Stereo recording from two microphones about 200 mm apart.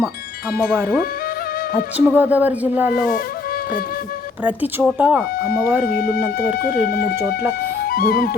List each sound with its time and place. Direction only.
0.7 s speech: 5° right (ahead or behind)
4.8 s speech: 5° right (ahead or behind)
5.8 s speech: 45° left (ahead or behind)